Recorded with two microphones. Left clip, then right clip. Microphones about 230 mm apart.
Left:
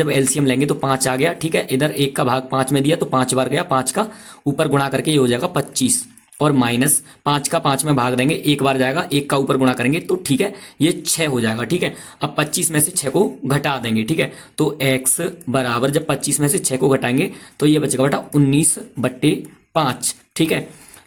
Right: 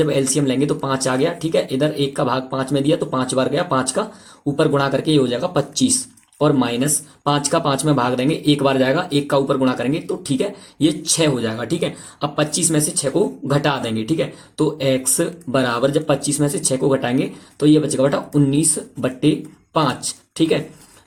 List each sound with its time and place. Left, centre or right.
0.0 s speech: left